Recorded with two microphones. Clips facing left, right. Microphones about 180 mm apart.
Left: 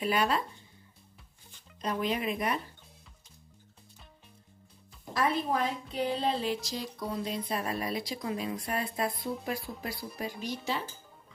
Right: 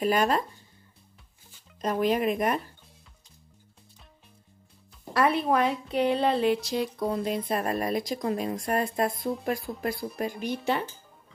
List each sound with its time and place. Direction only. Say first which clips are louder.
0.0 s speech: right 4 dB; 45° right (ahead or behind)
1.8 s speech: right 6 dB; 50° right (ahead or behind)
5.1 s a woman's voice: right 6 dB; 65° right (ahead or behind)